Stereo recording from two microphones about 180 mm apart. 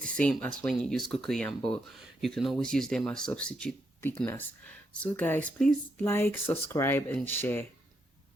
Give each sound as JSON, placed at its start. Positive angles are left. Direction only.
{"t": 0.0, "sound": "speech", "side_deg": 5}